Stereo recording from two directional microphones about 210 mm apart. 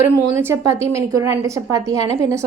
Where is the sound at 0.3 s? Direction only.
10° right (ahead or behind).